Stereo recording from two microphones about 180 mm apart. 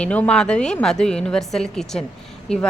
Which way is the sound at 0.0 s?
5° left (ahead or behind).